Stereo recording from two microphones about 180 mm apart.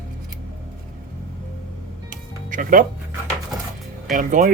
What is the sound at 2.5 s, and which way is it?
Speech, 50° right (ahead or behind).